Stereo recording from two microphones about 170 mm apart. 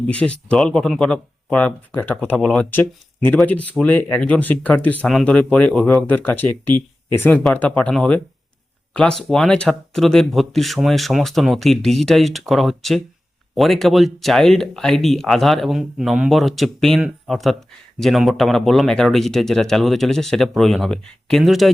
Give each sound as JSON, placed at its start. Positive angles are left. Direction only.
{"t": 0.1, "sound": "speech", "side_deg": 5}